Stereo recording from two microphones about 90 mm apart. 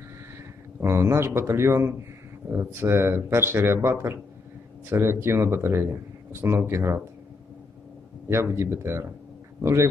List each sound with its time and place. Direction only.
0.7 s speech: 30° right (ahead or behind)
8.3 s speech: 30° right (ahead or behind)